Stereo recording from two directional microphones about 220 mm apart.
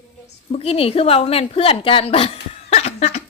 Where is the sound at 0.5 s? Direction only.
25° left (ahead or behind).